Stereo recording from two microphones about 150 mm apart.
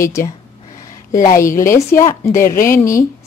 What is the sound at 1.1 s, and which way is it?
Speech, 55° left (ahead or behind).